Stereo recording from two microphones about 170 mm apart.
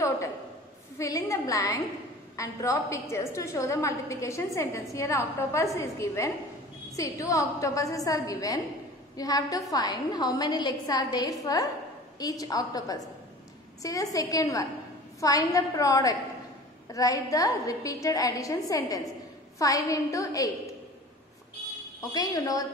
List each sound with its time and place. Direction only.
0.9 s a woman's voice: 20° left (ahead or behind)
22.1 s a woman's voice: 20° left (ahead or behind)